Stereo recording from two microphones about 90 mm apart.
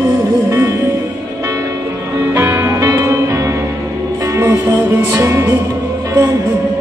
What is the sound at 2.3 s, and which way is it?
Music, 30° right (ahead or behind).